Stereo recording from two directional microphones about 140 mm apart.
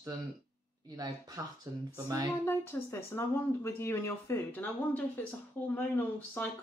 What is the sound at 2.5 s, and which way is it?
Speech, 20° left (ahead or behind).